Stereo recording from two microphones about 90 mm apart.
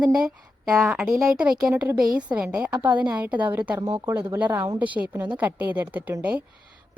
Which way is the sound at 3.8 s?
40° right (ahead or behind).